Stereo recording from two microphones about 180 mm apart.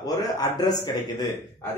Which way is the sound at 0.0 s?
20° left (ahead or behind).